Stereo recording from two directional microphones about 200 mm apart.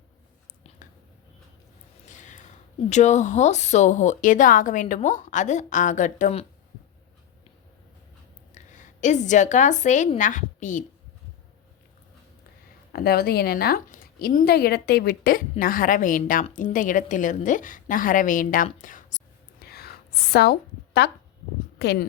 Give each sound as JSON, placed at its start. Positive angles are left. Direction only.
{"t": 2.0, "sound": "a sound", "side_deg": 40}
{"t": 2.9, "sound": "a woman's voice", "side_deg": 35}
{"t": 8.5, "sound": "a woman's voice", "side_deg": 40}
{"t": 12.9, "sound": "a woman's voice", "side_deg": 50}
{"t": 19.6, "sound": "a sound", "side_deg": 50}
{"t": 21.8, "sound": "speech", "side_deg": 55}